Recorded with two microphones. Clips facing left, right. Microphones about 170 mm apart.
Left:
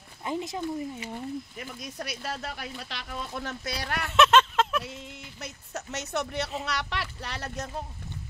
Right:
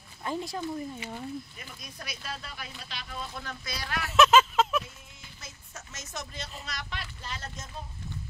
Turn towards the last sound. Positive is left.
turn(degrees=65)  # may be behind; listen again after turning